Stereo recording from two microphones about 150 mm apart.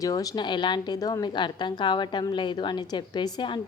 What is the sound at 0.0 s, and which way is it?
A woman's voice, 25° left (ahead or behind).